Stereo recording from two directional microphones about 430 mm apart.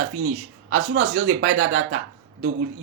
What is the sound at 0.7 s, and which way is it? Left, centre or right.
A man's voice, right.